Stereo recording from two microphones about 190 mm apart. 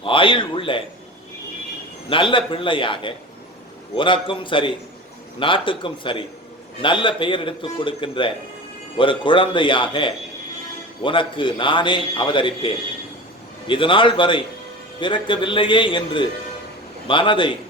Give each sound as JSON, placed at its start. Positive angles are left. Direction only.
{"t": 0.0, "sound": "a man's voice", "side_deg": 25}
{"t": 2.0, "sound": "a man's voice", "side_deg": 25}